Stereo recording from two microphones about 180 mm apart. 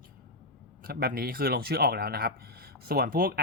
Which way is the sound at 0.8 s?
60° right (ahead or behind).